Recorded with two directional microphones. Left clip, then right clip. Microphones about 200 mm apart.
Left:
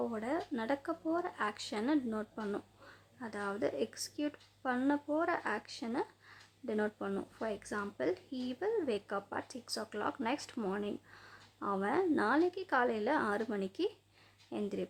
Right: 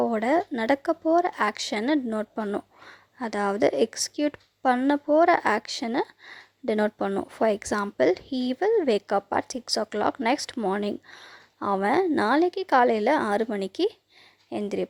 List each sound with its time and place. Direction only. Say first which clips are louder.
0.0 s speech: right 14 dB; 35° right (ahead or behind)